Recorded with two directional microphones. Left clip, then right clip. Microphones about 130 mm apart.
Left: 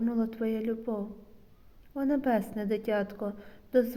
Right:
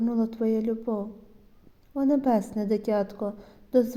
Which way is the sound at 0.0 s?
35° right (ahead or behind).